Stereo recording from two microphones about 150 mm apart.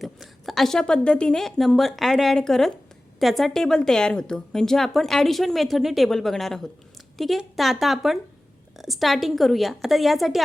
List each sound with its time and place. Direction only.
0.0 s speech: centre (ahead or behind)